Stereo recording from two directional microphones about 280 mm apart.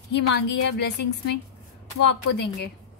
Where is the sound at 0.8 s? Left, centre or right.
Left.